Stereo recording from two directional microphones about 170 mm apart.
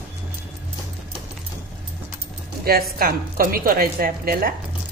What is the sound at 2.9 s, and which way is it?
A woman's voice, 60° right (ahead or behind).